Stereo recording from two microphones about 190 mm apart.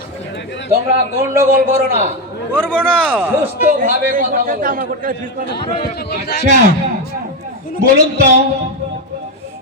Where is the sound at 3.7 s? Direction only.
45° right (ahead or behind).